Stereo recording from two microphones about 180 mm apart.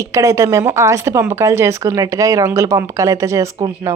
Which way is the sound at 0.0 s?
15° right (ahead or behind).